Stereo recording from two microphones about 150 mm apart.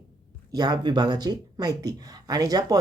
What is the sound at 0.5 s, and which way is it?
Speech, 30° right (ahead or behind).